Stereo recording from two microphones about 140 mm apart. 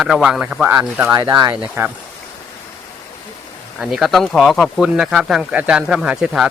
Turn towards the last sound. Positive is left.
turn(degrees=-5)  # may be behind; listen again after turning